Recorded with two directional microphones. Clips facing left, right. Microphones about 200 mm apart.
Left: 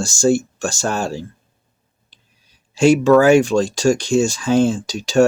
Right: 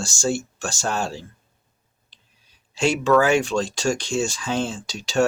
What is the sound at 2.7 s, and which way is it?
Speech, 45° left (ahead or behind).